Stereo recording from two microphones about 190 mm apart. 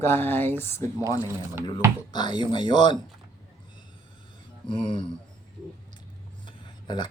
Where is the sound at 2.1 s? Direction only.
25° left (ahead or behind).